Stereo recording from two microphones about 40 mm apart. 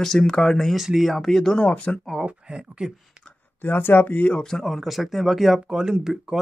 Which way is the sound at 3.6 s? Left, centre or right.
Left.